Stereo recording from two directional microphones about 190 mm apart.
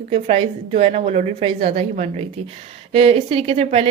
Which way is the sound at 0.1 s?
30° right (ahead or behind).